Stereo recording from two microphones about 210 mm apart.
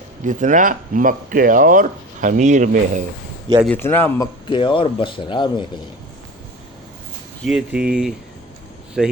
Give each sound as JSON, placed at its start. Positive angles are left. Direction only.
{"t": 0.3, "sound": "speech", "side_deg": -35}
{"t": 3.8, "sound": "a man's voice", "side_deg": 10}
{"t": 4.4, "sound": "speech", "side_deg": 25}
{"t": 7.4, "sound": "speech", "side_deg": -5}